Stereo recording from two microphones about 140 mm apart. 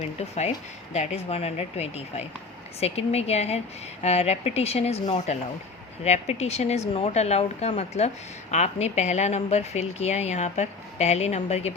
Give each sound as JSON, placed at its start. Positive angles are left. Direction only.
{"t": 0.2, "sound": "speech", "side_deg": 50}